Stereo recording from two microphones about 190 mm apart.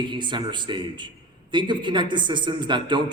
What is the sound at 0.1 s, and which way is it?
A man's voice, 25° right (ahead or behind).